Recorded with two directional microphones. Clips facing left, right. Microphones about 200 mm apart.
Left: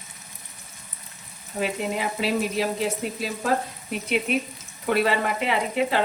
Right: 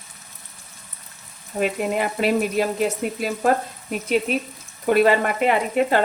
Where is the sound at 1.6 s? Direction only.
55° right (ahead or behind).